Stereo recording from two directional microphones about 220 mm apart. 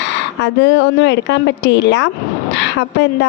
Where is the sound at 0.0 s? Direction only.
55° left (ahead or behind).